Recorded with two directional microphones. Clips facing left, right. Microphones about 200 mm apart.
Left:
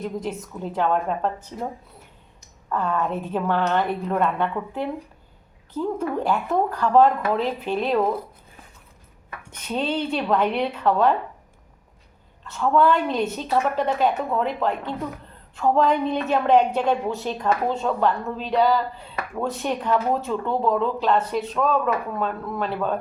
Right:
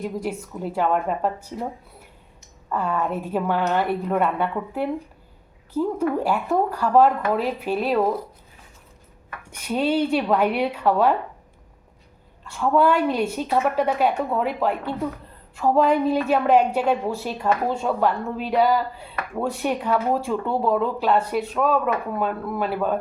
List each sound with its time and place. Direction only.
0.0 s a woman's voice: 10° right (ahead or behind)
2.6 s a woman's voice: 5° right (ahead or behind)
9.5 s a woman's voice: 10° right (ahead or behind)
12.5 s a woman's voice: 10° right (ahead or behind)